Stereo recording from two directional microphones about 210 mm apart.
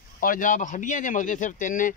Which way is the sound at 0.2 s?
40° left (ahead or behind).